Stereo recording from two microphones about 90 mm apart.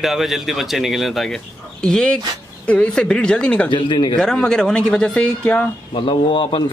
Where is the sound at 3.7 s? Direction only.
65° left (ahead or behind).